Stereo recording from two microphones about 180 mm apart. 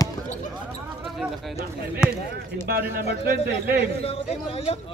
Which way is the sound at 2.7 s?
60° right (ahead or behind).